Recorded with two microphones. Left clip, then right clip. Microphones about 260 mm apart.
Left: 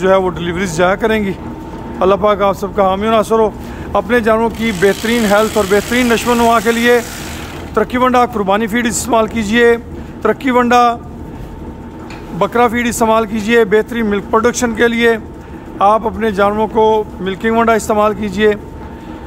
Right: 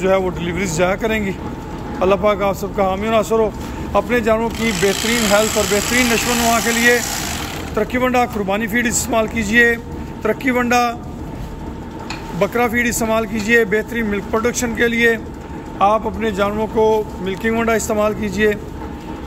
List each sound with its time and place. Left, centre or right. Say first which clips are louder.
0.0 s speech: left 5 dB; centre
12.4 s speech: left 4 dB; centre